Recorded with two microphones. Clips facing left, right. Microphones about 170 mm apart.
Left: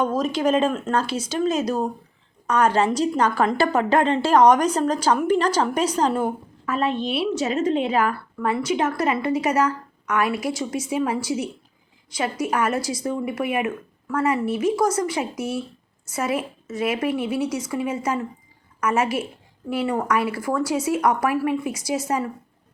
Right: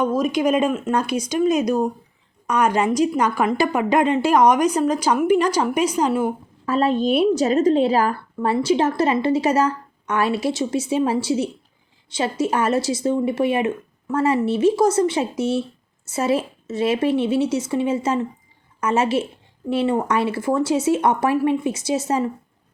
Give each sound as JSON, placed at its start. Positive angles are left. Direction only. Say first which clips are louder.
{"t": 0.0, "sound": "a woman's voice", "louder": "right 2 dB", "side_deg": -10}
{"t": 6.7, "sound": "a woman's voice", "louder": "right 5 dB", "side_deg": -35}